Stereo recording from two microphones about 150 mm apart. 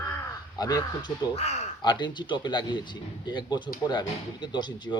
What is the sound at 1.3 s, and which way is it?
Speech, 45° left (ahead or behind).